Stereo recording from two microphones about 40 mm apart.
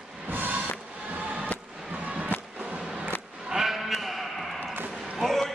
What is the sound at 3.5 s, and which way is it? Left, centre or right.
Sheep, centre.